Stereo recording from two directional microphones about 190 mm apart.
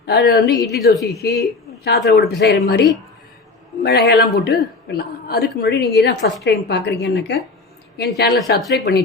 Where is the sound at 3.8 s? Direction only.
60° left (ahead or behind).